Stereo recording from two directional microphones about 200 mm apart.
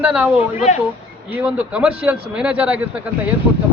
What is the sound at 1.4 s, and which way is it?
Speech, 5° right (ahead or behind).